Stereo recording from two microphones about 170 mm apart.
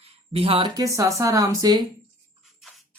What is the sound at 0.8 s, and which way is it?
Speech, 20° right (ahead or behind).